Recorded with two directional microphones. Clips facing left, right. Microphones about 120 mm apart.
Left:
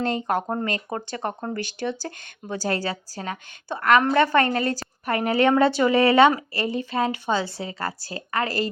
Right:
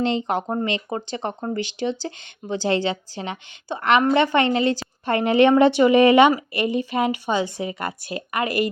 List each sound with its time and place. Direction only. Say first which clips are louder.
0.4 s speech: right 2 dB; 15° right (ahead or behind)